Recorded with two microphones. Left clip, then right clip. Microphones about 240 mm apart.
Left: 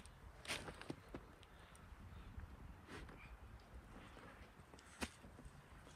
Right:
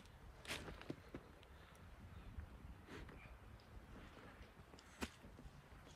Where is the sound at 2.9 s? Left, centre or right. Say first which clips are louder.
Left 1 dB; centre.